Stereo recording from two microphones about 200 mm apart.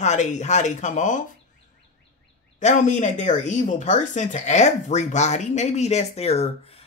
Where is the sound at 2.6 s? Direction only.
40° left (ahead or behind).